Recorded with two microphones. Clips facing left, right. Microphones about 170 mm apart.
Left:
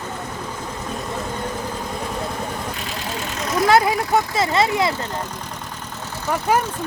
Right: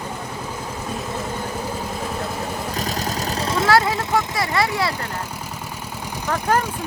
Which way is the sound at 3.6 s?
20° left (ahead or behind).